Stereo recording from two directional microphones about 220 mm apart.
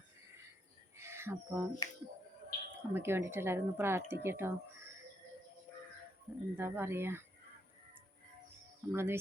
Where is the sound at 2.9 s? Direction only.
10° right (ahead or behind).